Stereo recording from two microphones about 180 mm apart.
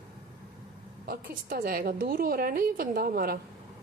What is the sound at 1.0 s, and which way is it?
A woman's voice, 55° right (ahead or behind).